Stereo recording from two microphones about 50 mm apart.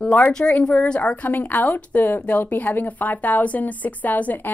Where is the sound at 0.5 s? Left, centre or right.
Left.